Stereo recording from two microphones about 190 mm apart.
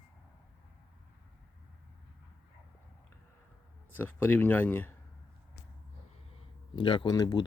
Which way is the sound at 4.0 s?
10° left (ahead or behind).